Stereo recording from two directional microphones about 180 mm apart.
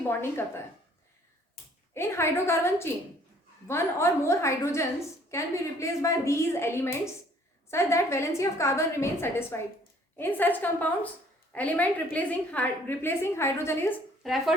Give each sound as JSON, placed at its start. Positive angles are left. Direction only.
{"t": 0.2, "sound": "a woman's voice", "side_deg": 15}
{"t": 1.9, "sound": "a woman's voice", "side_deg": 15}
{"t": 14.2, "sound": "speech", "side_deg": 0}